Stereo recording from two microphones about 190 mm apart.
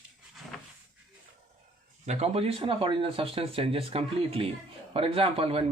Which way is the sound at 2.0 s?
35° right (ahead or behind).